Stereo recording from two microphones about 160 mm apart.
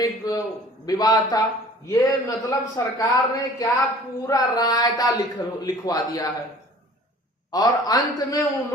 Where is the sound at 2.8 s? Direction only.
20° left (ahead or behind).